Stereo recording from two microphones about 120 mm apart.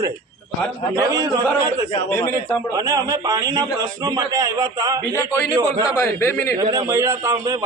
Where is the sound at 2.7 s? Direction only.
30° right (ahead or behind).